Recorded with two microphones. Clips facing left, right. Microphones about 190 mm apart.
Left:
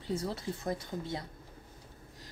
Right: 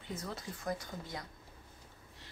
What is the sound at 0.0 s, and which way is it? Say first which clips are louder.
A woman's voice: left 7 dB; 30° left (ahead or behind).